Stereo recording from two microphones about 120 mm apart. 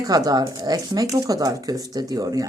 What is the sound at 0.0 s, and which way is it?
A woman's voice, 30° right (ahead or behind).